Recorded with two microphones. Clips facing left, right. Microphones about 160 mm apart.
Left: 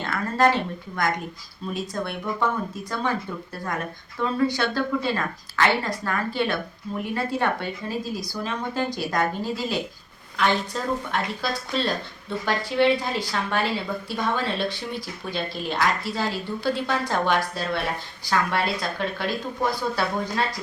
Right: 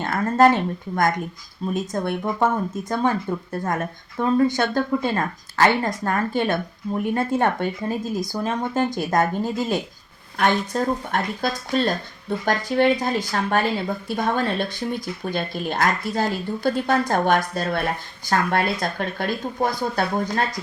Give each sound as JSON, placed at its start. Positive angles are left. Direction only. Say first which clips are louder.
{"t": 0.0, "sound": "speech", "louder": "right 5 dB", "side_deg": -45}